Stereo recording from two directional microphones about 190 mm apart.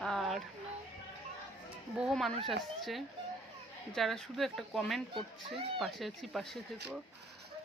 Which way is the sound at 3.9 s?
Centre (ahead or behind).